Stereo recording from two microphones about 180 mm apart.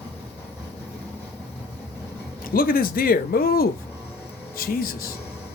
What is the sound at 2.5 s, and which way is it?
Speech, 55° left (ahead or behind).